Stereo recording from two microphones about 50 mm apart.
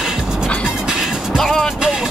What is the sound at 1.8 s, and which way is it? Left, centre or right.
Speech, centre.